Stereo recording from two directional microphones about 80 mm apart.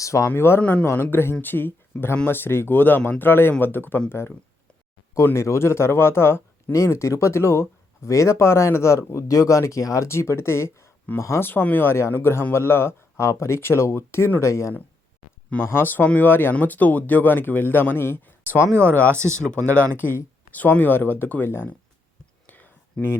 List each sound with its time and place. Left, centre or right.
0.0 s speech: left
0.3 s speech: left
0.6 s speech: centre; by 14.7 s left
15.7 s speech: left
19.1 s speech: right
19.6 s speech: centre
22.4 s a sound: left